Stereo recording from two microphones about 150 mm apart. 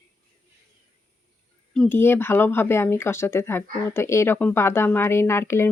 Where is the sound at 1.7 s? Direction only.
5° left (ahead or behind).